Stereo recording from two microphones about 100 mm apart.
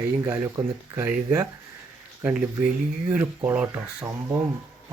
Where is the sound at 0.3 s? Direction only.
30° right (ahead or behind).